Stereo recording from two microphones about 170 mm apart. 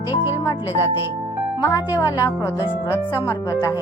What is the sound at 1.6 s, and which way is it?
Speech, 20° left (ahead or behind).